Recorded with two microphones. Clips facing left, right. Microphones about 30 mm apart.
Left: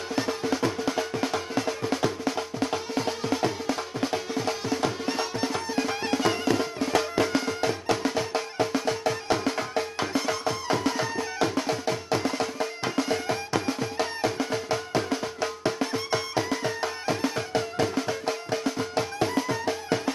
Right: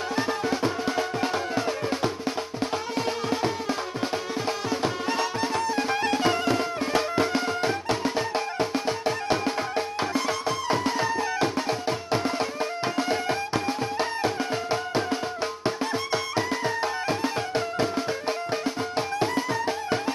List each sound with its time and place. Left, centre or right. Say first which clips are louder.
0.1 s music: even; right
2.7 s music: right 1 dB; centre